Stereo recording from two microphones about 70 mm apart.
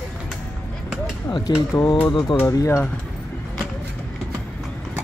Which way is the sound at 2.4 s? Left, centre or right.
Left.